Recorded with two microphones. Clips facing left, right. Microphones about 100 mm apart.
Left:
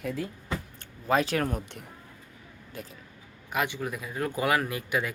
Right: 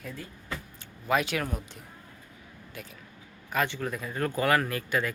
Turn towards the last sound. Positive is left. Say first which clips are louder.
# even
turn(degrees=15)  # may be behind; listen again after turning